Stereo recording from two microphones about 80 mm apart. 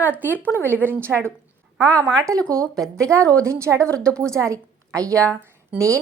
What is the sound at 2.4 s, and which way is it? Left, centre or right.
Speech, right.